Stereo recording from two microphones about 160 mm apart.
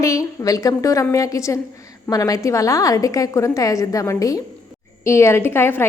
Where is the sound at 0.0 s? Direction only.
20° left (ahead or behind).